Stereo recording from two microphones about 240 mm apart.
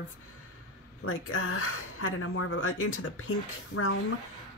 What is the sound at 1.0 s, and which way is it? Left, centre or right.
Speech, left.